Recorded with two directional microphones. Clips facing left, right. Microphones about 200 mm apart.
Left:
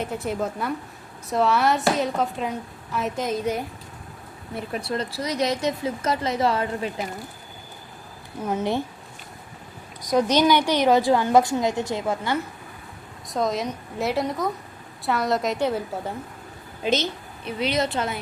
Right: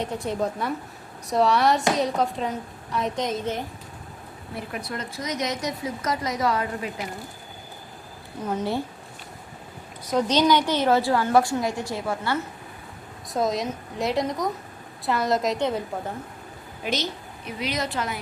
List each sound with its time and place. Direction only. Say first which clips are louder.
0.0 s a woman's voice: even; 5° left (ahead or behind)
4.7 s speech: left 7 dB; 30° left (ahead or behind)
8.4 s a woman's voice: left 2 dB; 10° left (ahead or behind)
10.0 s a woman's voice: left 2 dB; 10° left (ahead or behind)
13.2 s a woman's voice: even; centre (ahead or behind)
16.8 s speech: left 4 dB; 25° left (ahead or behind)